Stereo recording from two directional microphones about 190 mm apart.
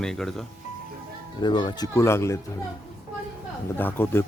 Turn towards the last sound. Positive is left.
turn(degrees=10)  # may be behind; listen again after turning